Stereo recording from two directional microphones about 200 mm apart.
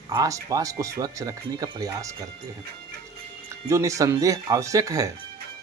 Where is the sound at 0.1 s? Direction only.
15° right (ahead or behind).